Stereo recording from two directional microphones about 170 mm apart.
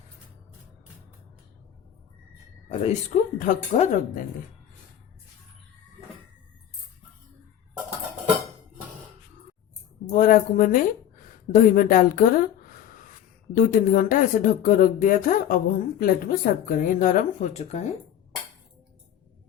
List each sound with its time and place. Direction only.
2.7 s speech: 45° left (ahead or behind)
10.1 s speech: 50° left (ahead or behind)
13.6 s speech: 55° left (ahead or behind); by 17.8 s 40° left (ahead or behind)